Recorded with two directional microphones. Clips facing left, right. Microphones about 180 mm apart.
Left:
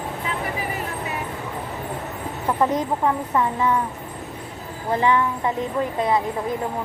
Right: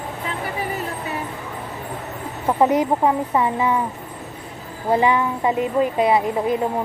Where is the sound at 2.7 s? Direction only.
10° right (ahead or behind).